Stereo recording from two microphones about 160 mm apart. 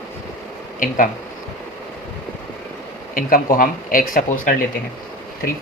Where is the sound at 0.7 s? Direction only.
55° left (ahead or behind).